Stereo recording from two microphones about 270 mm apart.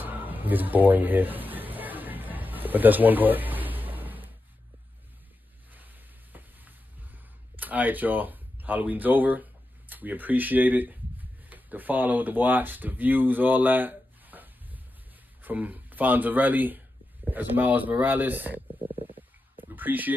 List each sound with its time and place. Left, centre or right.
0.0 s a sound: centre
5.7 s sizzle: centre
15.4 s speech: centre
18.9 s stomach rumble: centre
19.7 s speech: centre